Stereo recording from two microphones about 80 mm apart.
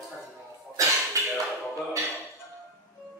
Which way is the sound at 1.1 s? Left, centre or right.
Right.